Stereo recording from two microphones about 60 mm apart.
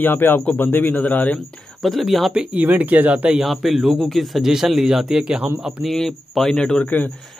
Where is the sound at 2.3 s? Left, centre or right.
Centre.